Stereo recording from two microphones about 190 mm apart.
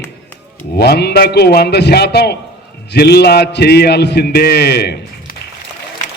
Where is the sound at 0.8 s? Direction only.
60° left (ahead or behind).